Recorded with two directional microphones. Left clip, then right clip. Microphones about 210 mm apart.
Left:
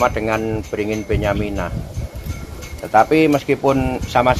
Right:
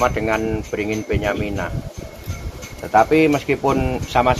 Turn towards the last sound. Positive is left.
turn(degrees=45)  # may be behind; listen again after turning